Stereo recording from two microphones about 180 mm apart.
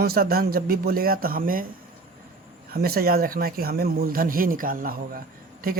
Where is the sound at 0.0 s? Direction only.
60° right (ahead or behind).